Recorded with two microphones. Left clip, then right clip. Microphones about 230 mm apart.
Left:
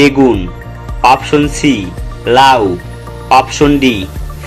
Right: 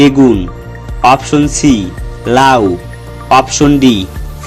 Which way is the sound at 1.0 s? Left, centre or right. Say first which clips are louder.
Even; right.